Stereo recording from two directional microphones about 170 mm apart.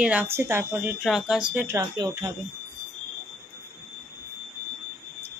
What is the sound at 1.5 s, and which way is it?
Speech, 15° right (ahead or behind).